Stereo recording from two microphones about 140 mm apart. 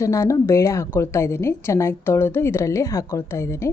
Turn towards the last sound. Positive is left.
turn(degrees=20)  # may be behind; listen again after turning